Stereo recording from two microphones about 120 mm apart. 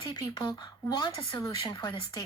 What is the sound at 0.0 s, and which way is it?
Speech, 40° left (ahead or behind).